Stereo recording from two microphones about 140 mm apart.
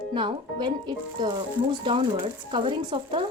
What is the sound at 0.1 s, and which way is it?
A woman's voice, 35° right (ahead or behind).